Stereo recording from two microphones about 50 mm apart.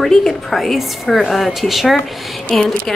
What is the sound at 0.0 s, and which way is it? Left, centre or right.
A woman's voice, centre.